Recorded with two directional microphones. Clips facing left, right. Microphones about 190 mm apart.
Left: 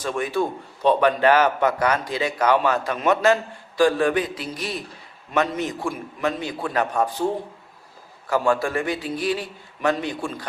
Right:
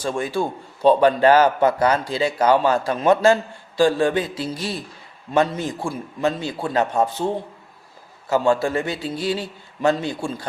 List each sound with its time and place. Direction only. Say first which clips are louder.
0.0 s a man's voice: right 1 dB; 30° right (ahead or behind)
8.3 s a man's voice: right 2 dB; 25° right (ahead or behind)